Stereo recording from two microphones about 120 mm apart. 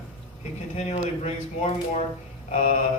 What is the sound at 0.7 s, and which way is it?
Speech, 60° left (ahead or behind).